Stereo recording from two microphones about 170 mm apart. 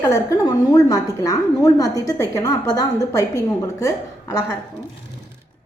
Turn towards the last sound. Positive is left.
turn(degrees=20)  # may be behind; listen again after turning